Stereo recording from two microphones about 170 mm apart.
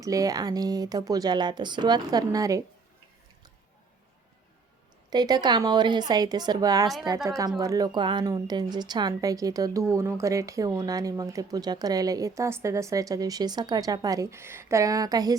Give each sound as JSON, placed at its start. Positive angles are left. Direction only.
{"t": 0.0, "sound": "a woman's voice", "side_deg": -20}
{"t": 5.1, "sound": "a woman's voice", "side_deg": -25}